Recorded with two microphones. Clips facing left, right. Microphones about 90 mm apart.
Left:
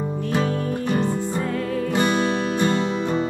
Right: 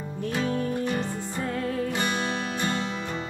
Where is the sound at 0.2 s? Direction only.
45° left (ahead or behind).